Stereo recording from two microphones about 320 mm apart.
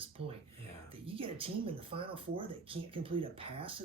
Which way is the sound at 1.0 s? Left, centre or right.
Centre.